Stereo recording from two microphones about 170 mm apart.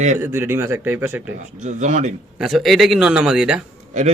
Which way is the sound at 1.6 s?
45° right (ahead or behind).